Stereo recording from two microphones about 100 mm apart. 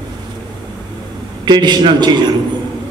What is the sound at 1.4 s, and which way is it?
Speech, 45° right (ahead or behind).